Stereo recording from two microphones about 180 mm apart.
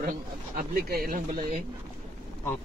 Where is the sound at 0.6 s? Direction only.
55° right (ahead or behind).